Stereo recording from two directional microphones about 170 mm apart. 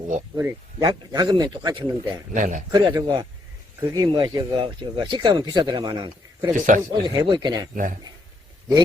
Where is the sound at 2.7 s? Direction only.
25° right (ahead or behind).